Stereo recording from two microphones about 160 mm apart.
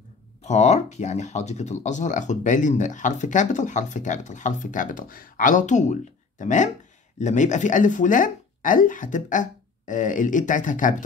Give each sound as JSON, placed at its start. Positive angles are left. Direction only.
{"t": 0.4, "sound": "speech", "side_deg": 45}